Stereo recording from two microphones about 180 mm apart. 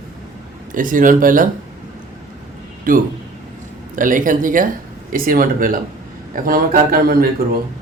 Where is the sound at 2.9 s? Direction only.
50° right (ahead or behind).